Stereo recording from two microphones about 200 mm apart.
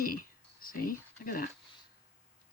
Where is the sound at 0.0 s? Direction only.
45° left (ahead or behind).